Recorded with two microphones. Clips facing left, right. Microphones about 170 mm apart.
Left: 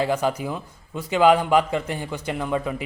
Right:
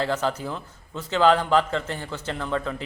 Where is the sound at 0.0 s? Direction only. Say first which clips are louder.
Left 3 dB; 10° left (ahead or behind).